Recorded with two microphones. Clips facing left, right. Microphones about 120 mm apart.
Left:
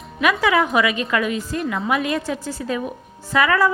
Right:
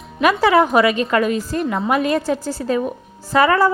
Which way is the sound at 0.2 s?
35° right (ahead or behind).